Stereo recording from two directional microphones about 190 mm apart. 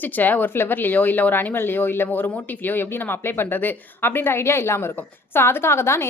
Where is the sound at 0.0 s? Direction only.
10° left (ahead or behind).